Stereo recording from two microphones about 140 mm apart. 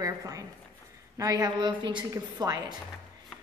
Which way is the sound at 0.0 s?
25° right (ahead or behind).